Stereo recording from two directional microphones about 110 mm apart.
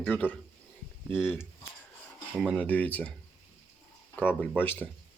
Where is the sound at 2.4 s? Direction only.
10° left (ahead or behind).